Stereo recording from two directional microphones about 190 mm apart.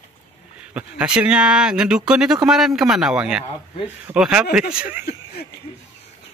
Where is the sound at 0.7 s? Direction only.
5° right (ahead or behind).